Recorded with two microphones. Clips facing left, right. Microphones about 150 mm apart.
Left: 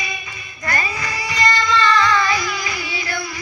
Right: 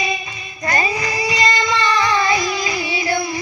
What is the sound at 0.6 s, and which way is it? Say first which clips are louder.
Child singing: right 4 dB; 20° right (ahead or behind).